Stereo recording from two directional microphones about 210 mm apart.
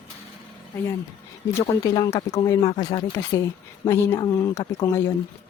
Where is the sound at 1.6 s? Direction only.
15° left (ahead or behind).